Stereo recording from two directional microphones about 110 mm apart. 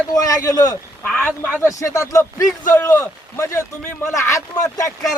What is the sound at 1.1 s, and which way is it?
Speech, 5° left (ahead or behind).